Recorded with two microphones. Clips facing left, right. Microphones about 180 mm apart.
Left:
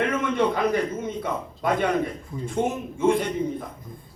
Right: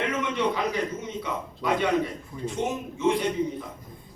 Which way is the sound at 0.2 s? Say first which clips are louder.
Left 4 dB; 50° left (ahead or behind).